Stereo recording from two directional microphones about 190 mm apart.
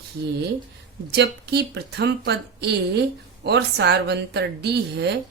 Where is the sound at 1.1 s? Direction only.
60° right (ahead or behind).